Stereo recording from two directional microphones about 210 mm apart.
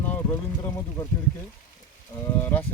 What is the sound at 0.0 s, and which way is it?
Speech, 10° left (ahead or behind).